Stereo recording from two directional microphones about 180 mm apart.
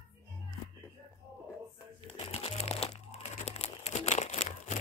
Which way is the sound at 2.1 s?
35° left (ahead or behind).